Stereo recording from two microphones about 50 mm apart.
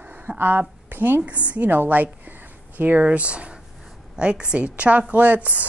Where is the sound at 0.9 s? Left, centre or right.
Right.